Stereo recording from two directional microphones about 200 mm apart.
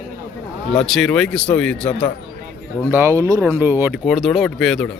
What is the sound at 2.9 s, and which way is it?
Speech, 10° right (ahead or behind).